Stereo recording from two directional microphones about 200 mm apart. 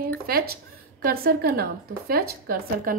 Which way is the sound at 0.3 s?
50° right (ahead or behind).